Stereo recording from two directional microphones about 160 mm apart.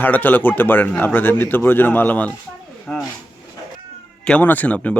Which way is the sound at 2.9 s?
5° left (ahead or behind).